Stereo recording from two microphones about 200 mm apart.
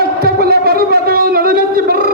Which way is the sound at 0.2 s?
50° right (ahead or behind).